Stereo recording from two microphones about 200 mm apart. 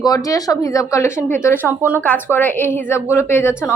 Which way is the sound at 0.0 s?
20° left (ahead or behind).